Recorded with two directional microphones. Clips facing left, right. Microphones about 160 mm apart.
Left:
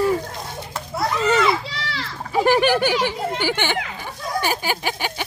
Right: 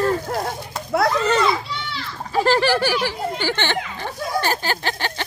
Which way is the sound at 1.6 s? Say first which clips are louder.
Even; 90° left.